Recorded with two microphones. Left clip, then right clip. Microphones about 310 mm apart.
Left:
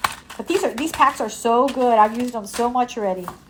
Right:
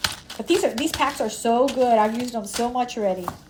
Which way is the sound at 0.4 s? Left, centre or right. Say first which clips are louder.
Even; centre.